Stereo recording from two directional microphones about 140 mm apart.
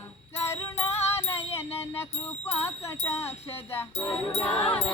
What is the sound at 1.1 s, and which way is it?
Music, 15° left (ahead or behind).